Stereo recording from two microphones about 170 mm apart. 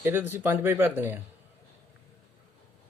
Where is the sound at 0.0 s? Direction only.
10° right (ahead or behind).